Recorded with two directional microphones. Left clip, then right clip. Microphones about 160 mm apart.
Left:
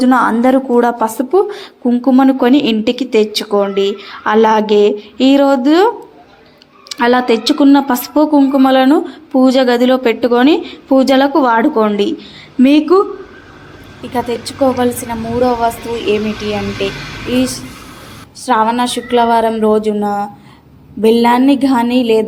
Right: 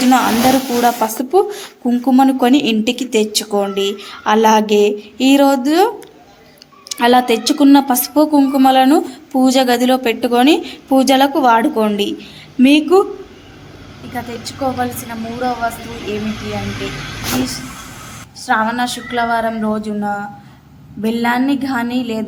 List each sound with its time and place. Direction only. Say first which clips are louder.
0.0 s a woman's voice: left 2 dB; 15° left (ahead or behind)
14.1 s a woman's voice: left 8 dB; 25° left (ahead or behind)
18.4 s a woman's voice: left 4 dB; 15° left (ahead or behind)